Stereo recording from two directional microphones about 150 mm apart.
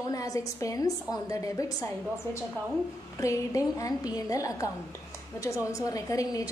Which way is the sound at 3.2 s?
20° left (ahead or behind).